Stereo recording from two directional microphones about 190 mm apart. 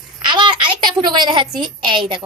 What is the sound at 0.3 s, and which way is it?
A child's voice, 25° right (ahead or behind).